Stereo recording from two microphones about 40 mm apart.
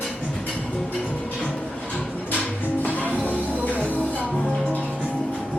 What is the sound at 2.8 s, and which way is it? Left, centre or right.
Music, left.